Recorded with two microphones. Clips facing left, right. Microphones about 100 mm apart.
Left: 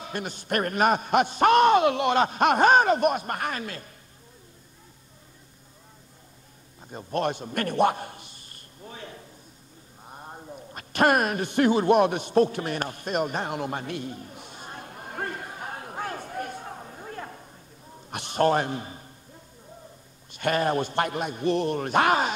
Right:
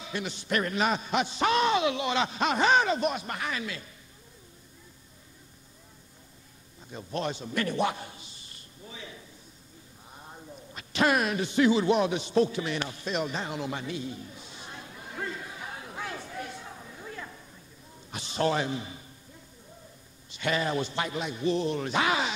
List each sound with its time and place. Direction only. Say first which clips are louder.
0.0 s a man's voice: left 2 dB; 50° left (ahead or behind)
6.9 s a sound: left 5 dB; 50° left (ahead or behind)
18.1 s a man's voice: left 5 dB; 55° left (ahead or behind)
20.2 s a man's voice: left 4 dB; 50° left (ahead or behind)